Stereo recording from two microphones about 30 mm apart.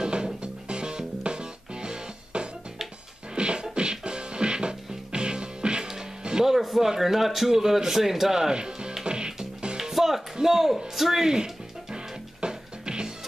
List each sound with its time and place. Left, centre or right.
0.0 s music: right
3.3 s beatboxing: right
3.7 s music: right
6.4 s music: centre
6.9 s speech: centre; by 8.9 s right
9.0 s music: right
9.8 s music: centre
10.3 s speech: centre
11.2 s music: right